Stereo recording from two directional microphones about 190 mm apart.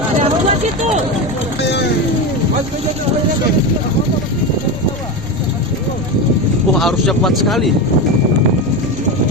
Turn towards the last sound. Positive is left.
turn(degrees=0)  # may be behind; listen again after turning